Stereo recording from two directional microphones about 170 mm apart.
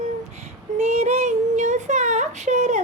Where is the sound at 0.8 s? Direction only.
40° right (ahead or behind).